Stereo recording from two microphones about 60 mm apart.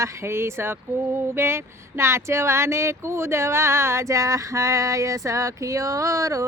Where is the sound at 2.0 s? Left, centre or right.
Right.